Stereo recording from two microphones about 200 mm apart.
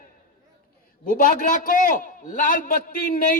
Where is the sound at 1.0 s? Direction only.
45° left (ahead or behind).